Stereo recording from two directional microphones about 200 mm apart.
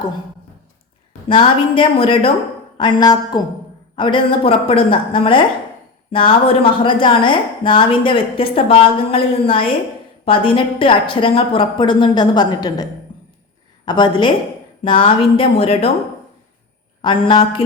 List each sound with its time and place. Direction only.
1.3 s a woman's voice: 25° left (ahead or behind)
17.0 s a woman's voice: 25° left (ahead or behind)